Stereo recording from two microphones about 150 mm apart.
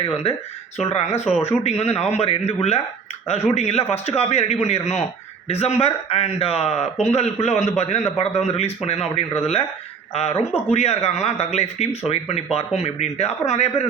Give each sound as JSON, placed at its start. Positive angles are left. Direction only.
{"t": 0.0, "sound": "speech", "side_deg": 40}